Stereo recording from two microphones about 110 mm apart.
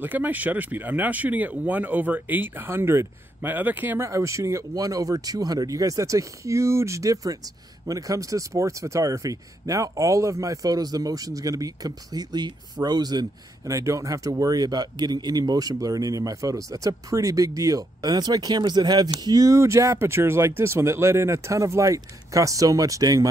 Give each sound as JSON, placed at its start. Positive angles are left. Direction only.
{"t": 0.0, "sound": "speech", "side_deg": -15}